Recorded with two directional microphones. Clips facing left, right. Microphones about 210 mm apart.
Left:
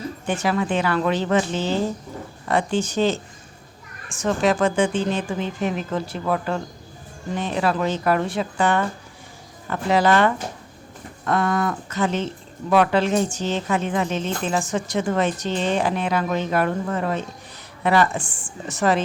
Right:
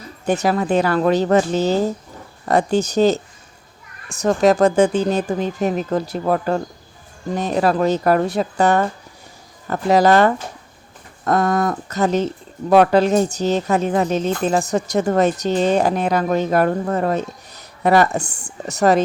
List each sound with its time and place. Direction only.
0.3 s speech: 40° right (ahead or behind)